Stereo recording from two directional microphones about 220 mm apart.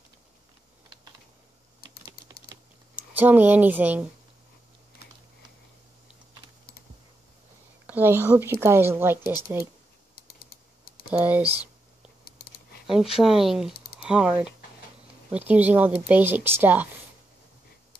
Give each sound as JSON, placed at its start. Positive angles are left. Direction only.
{"t": 2.2, "sound": "typing", "side_deg": 45}
{"t": 3.0, "sound": "speech", "side_deg": -5}
{"t": 7.8, "sound": "speech", "side_deg": -10}
{"t": 10.1, "sound": "typing", "side_deg": 45}
{"t": 11.1, "sound": "speech", "side_deg": -5}
{"t": 12.3, "sound": "typing", "side_deg": 45}
{"t": 13.2, "sound": "speech", "side_deg": 0}